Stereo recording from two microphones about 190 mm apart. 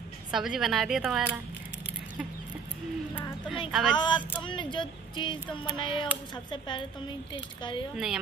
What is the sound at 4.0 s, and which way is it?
Speech, 25° left (ahead or behind).